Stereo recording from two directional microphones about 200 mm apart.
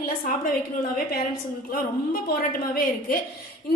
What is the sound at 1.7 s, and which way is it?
A woman's voice, 45° left (ahead or behind).